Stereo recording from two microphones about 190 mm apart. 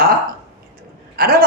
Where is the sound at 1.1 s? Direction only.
55° right (ahead or behind).